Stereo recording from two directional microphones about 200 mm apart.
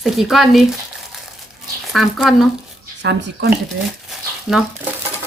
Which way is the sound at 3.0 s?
55° right (ahead or behind).